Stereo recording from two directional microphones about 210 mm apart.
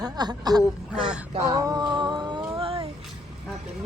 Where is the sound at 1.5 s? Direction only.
15° right (ahead or behind).